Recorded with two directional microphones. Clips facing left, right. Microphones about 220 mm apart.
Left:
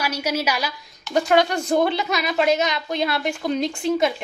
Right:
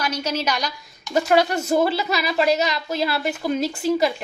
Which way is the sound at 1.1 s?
5° right (ahead or behind).